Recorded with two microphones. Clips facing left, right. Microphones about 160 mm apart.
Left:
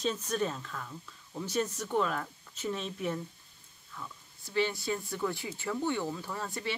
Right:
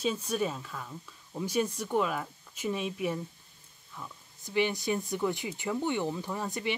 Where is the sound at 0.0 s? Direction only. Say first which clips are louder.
Right 1 dB; 10° right (ahead or behind).